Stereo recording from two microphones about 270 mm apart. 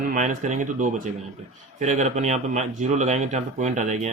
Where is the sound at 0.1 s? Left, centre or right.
Right.